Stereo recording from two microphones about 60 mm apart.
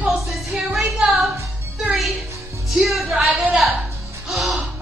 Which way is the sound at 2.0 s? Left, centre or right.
Centre.